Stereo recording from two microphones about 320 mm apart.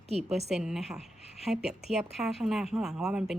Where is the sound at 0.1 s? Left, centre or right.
Centre.